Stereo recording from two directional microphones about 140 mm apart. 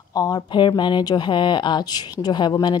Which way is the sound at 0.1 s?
25° left (ahead or behind).